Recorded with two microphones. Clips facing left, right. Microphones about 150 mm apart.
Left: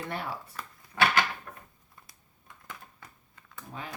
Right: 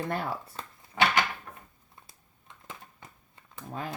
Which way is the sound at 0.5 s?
20° right (ahead or behind).